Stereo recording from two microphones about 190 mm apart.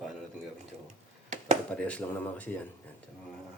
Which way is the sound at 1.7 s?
5° left (ahead or behind).